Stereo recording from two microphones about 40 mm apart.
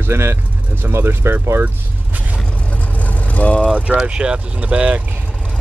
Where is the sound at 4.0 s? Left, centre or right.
Right.